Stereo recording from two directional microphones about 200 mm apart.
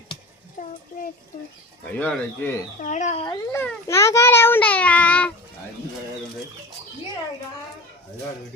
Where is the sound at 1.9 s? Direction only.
10° left (ahead or behind).